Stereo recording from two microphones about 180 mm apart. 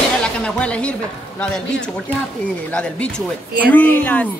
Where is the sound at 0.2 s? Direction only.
5° left (ahead or behind).